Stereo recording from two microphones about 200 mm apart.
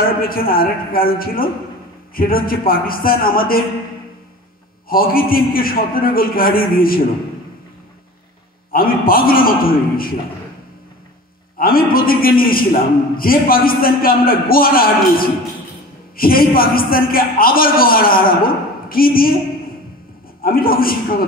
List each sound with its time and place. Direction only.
0.2 s a man's voice: 45° left (ahead or behind)
4.8 s a man's voice: 45° left (ahead or behind)
8.7 s a man's voice: 45° left (ahead or behind)
11.5 s a man's voice: 45° left (ahead or behind)
20.4 s a man's voice: 45° left (ahead or behind)